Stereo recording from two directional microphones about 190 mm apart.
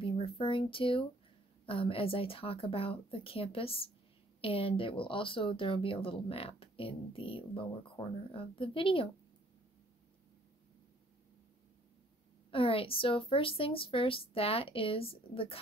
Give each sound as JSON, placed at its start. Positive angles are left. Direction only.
{"t": 0.0, "sound": "speech", "side_deg": 30}
{"t": 12.4, "sound": "speech", "side_deg": 30}